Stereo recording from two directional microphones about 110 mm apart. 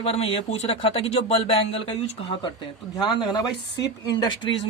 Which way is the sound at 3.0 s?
40° left (ahead or behind).